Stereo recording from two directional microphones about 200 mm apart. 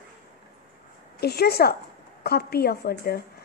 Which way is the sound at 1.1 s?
55° left (ahead or behind).